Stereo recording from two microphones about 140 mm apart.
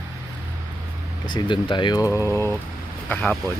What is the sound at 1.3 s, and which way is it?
Speech, 35° left (ahead or behind).